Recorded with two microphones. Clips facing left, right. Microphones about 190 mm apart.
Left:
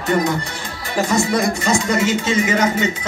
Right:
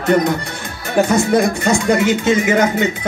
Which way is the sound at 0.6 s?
55° right (ahead or behind).